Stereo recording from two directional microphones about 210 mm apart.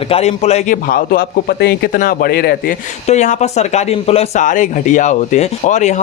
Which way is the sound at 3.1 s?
35° left (ahead or behind).